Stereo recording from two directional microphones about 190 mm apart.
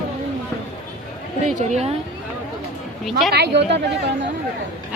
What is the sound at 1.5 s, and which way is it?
Speech, 35° right (ahead or behind).